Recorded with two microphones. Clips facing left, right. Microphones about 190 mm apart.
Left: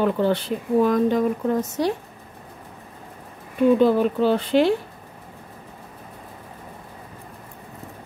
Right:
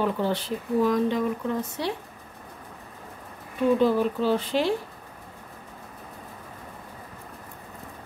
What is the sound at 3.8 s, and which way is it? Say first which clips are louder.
Speech: left 4 dB; 60° left (ahead or behind).